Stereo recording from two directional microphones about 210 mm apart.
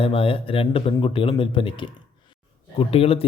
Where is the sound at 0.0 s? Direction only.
25° left (ahead or behind).